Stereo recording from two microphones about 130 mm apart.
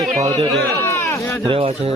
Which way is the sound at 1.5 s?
45° right (ahead or behind).